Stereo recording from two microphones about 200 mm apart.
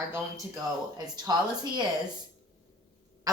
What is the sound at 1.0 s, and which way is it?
Speech, 20° right (ahead or behind).